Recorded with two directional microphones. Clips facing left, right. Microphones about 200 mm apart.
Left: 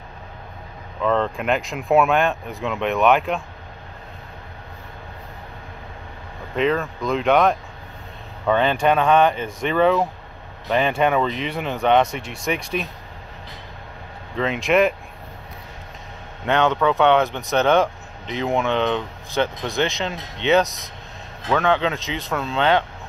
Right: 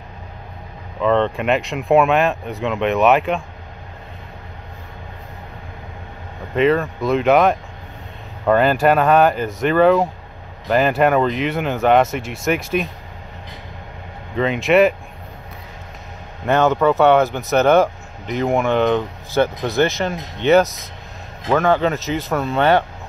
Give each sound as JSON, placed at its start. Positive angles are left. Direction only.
{"t": 1.0, "sound": "speech", "side_deg": 0}
{"t": 6.5, "sound": "speech", "side_deg": 0}
{"t": 14.3, "sound": "speech", "side_deg": 0}
{"t": 16.4, "sound": "speech", "side_deg": -5}
{"t": 21.5, "sound": "speech", "side_deg": -5}
{"t": 22.3, "sound": "speech", "side_deg": -15}